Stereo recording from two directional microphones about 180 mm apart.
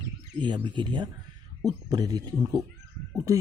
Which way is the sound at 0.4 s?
25° right (ahead or behind).